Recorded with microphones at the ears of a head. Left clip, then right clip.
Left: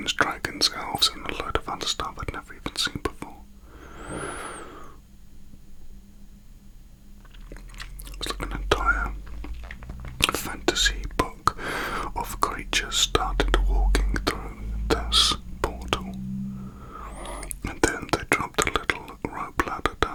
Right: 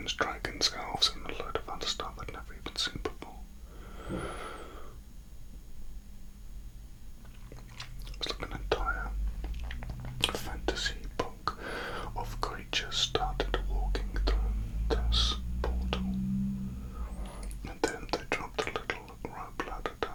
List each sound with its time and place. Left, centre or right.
0.0 s whispering: left
3.8 s vehicle: left
8.4 s whispering: left